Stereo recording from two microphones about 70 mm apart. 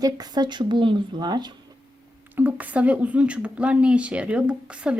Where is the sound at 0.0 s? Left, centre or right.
Right.